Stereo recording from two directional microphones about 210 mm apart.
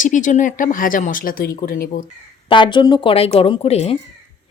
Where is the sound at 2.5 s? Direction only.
20° left (ahead or behind).